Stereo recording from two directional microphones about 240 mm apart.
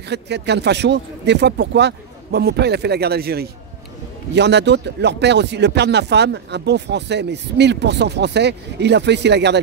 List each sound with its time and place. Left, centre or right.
0.1 s speech: right